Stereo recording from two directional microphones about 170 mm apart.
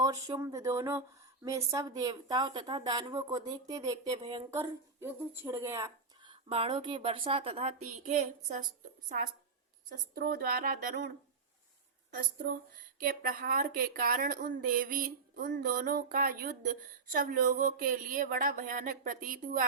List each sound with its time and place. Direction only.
0.0 s a woman's voice: 20° right (ahead or behind)
6.5 s a woman's voice: 35° right (ahead or behind)
9.0 s speech: 55° right (ahead or behind)
13.0 s speech: 55° right (ahead or behind)